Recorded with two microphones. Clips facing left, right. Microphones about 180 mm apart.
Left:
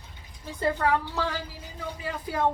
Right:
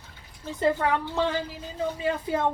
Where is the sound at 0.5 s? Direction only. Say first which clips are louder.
Right 1 dB; 20° right (ahead or behind).